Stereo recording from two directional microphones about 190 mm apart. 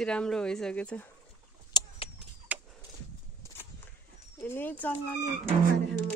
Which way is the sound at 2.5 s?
10° right (ahead or behind).